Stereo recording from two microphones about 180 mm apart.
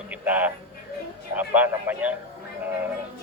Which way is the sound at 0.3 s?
10° right (ahead or behind).